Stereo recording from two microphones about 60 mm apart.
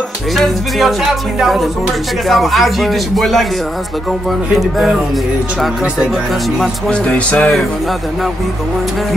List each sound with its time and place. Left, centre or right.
0.4 s speech: centre
4.6 s speech: centre
6.9 s music: centre